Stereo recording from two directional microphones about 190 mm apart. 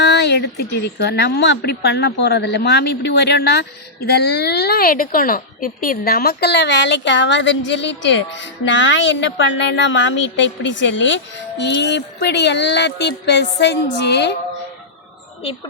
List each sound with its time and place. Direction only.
0.0 s a woman's voice: 60° left (ahead or behind)